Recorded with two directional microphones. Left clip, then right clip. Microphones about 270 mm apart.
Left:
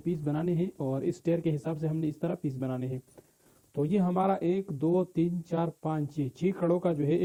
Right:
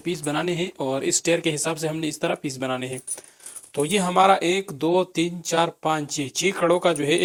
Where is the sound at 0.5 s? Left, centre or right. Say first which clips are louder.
Right 7 dB; right.